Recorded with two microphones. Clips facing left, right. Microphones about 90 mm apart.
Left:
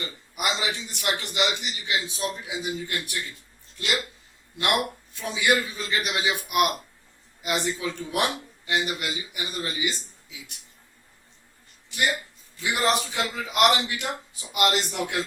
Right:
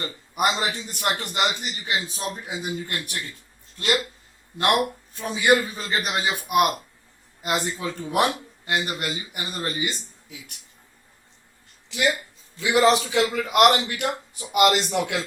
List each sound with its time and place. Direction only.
0.0 s a man's voice: 45° right (ahead or behind)
5.1 s a man's voice: 40° right (ahead or behind)
12.5 s a man's voice: 90° right